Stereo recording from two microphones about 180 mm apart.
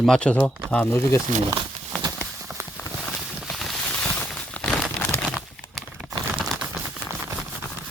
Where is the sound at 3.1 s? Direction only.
Centre (ahead or behind).